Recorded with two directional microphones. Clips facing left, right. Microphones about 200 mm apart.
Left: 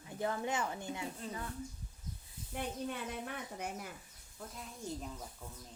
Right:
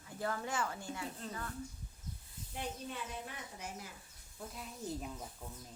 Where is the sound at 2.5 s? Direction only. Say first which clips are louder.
Left 3 dB; 55° left (ahead or behind).